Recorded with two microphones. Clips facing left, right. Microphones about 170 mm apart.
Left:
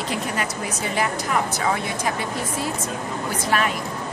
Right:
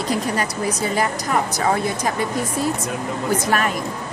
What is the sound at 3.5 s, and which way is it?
Speech, 45° right (ahead or behind).